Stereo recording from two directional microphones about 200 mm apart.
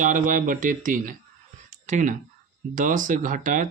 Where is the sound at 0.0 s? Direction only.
40° right (ahead or behind).